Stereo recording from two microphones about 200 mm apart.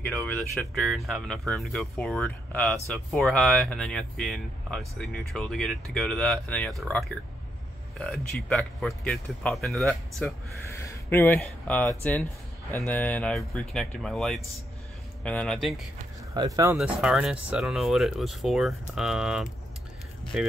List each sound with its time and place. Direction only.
0.0 s speech: 5° left (ahead or behind)
8.0 s speech: centre (ahead or behind)
10.7 s speech: 10° left (ahead or behind)
16.3 s speech: 15° right (ahead or behind)
16.7 s speech: centre (ahead or behind)